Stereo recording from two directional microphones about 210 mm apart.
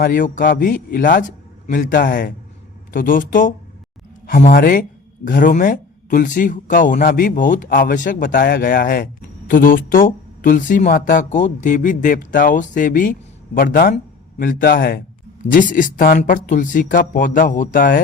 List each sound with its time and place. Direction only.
0.0 s speech: 40° left (ahead or behind)